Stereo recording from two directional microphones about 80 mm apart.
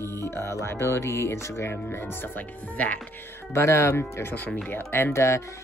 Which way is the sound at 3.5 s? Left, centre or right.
Left.